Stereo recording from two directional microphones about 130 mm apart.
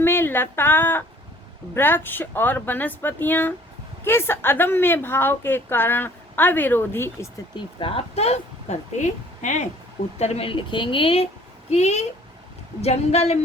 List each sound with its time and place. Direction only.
0.0 s a woman's voice: 15° left (ahead or behind)
7.5 s speech: 40° left (ahead or behind); by 9.6 s 65° left (ahead or behind)
10.2 s a woman's voice: 55° left (ahead or behind)
11.7 s speech: 60° left (ahead or behind)